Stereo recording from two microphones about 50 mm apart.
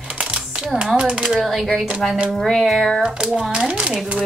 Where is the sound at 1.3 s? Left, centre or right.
Centre.